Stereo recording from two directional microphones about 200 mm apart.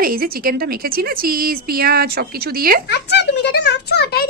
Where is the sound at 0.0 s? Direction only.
45° right (ahead or behind).